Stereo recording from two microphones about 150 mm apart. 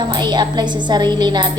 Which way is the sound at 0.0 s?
30° right (ahead or behind).